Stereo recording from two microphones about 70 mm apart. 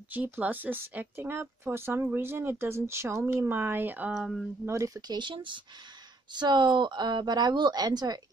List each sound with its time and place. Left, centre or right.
0.1 s speech: right
4.1 s a sound: centre
4.6 s speech: right
5.0 s speech: right
6.3 s speech: right